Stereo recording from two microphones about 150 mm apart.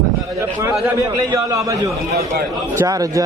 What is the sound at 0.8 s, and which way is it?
A man's voice, 20° right (ahead or behind).